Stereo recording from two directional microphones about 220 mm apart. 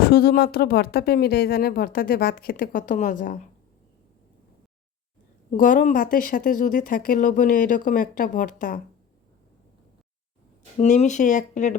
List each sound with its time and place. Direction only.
0.0 s speech: 45° left (ahead or behind)
5.5 s speech: 40° left (ahead or behind)
10.8 s speech: 30° left (ahead or behind)